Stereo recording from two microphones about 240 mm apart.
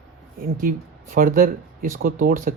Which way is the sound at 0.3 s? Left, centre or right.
Right.